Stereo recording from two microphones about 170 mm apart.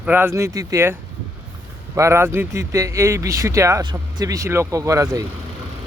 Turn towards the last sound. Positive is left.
turn(degrees=-20)  # may be behind; listen again after turning